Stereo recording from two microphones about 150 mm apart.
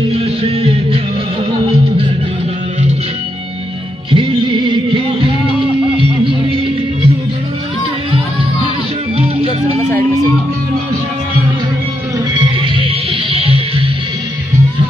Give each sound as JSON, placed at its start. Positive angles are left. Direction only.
{"t": 0.1, "sound": "music", "side_deg": -40}
{"t": 4.1, "sound": "music", "side_deg": -35}
{"t": 9.8, "sound": "music", "side_deg": 20}
{"t": 12.4, "sound": "music", "side_deg": -35}